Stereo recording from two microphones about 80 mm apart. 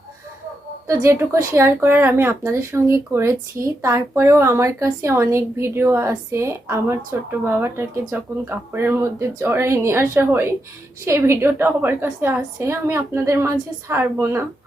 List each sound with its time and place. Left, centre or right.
1.0 s speech: right